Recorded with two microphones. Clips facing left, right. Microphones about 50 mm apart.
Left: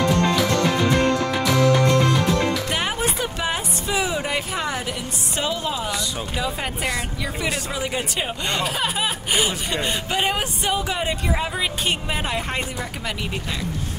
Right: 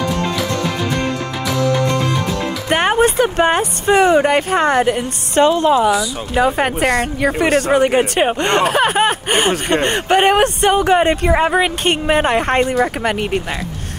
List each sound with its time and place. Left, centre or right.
2.7 s speech: right
5.7 s speech: right
6.3 s speech: right